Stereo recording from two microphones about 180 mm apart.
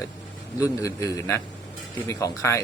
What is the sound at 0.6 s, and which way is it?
Speech, 15° left (ahead or behind).